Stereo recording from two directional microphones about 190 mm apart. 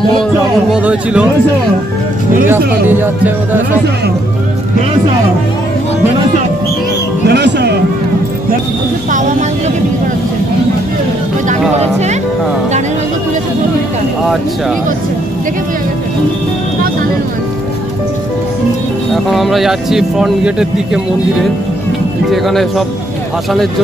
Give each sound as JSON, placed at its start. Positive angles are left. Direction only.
{"t": 0.2, "sound": "speech", "side_deg": -5}
{"t": 2.9, "sound": "speech", "side_deg": -10}
{"t": 7.2, "sound": "music", "side_deg": -65}
{"t": 11.8, "sound": "speech", "side_deg": -35}
{"t": 19.2, "sound": "speech", "side_deg": 0}